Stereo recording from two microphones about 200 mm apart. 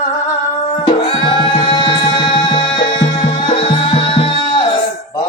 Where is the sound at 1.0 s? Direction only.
30° left (ahead or behind).